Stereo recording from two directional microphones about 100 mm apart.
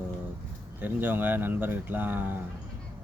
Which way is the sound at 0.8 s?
20° right (ahead or behind).